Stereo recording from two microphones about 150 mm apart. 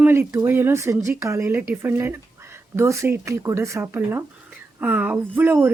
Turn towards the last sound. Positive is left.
turn(degrees=-15)  # may be behind; listen again after turning